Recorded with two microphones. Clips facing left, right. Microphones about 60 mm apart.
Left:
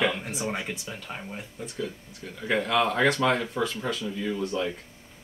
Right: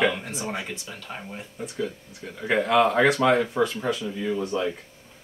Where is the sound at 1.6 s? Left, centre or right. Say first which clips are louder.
Right 4 dB; centre.